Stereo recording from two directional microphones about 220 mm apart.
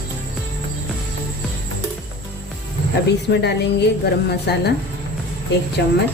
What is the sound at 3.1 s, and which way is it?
A woman's voice, 50° left (ahead or behind).